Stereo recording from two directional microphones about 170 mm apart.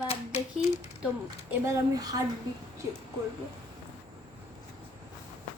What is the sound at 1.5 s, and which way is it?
Speech, 20° right (ahead or behind).